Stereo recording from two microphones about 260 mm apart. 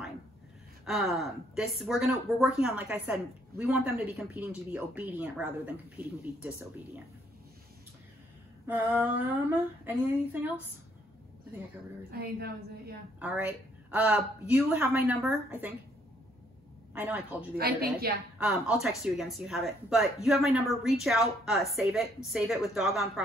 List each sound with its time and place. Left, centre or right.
0.8 s a woman's voice: centre
8.6 s a sound: centre
12.1 s a woman's voice: right
13.2 s a woman's voice: centre
16.9 s a woman's voice: centre
17.6 s a woman's voice: right
18.4 s a woman's voice: centre